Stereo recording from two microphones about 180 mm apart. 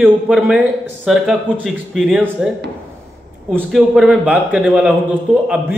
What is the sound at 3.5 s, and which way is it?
A man's voice, centre (ahead or behind).